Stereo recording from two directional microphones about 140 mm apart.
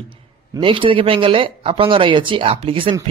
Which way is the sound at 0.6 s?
40° right (ahead or behind).